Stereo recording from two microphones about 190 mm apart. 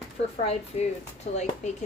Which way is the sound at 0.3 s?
35° left (ahead or behind).